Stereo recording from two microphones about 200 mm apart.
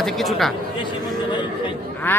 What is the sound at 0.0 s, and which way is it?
Speech, centre (ahead or behind).